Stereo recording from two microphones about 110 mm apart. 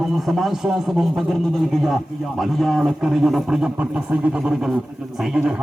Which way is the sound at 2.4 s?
Centre (ahead or behind).